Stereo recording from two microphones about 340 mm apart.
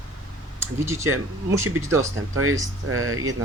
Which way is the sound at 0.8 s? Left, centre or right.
Centre.